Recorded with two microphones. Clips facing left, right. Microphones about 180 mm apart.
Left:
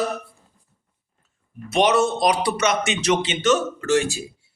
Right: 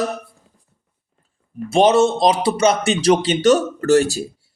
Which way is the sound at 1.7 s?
30° right (ahead or behind).